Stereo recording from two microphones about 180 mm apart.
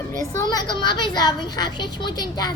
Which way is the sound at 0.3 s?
20° left (ahead or behind).